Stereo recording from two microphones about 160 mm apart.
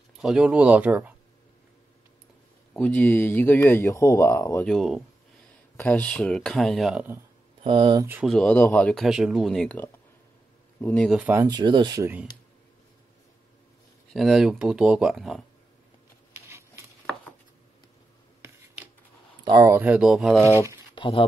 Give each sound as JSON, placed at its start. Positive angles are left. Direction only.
{"t": 0.2, "sound": "speech", "side_deg": -5}
{"t": 2.7, "sound": "speech", "side_deg": 10}
{"t": 4.6, "sound": "speech", "side_deg": 0}
{"t": 7.6, "sound": "speech", "side_deg": -30}
{"t": 8.0, "sound": "speech", "side_deg": -10}
{"t": 8.3, "sound": "speech", "side_deg": 5}
{"t": 11.1, "sound": "speech", "side_deg": -5}
{"t": 11.3, "sound": "speech", "side_deg": -25}
{"t": 14.1, "sound": "speech", "side_deg": 0}
{"t": 16.3, "sound": "a sound", "side_deg": -15}
{"t": 18.4, "sound": "a sound", "side_deg": -15}
{"t": 19.4, "sound": "speech", "side_deg": -20}
{"t": 20.4, "sound": "speech", "side_deg": -20}
{"t": 20.9, "sound": "a sound", "side_deg": 35}